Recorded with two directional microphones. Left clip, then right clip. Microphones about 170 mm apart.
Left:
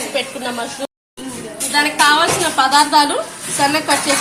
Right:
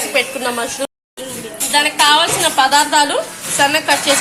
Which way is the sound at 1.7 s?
5° right (ahead or behind).